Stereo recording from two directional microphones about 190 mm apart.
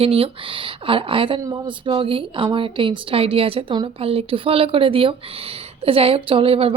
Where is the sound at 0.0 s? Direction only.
30° right (ahead or behind).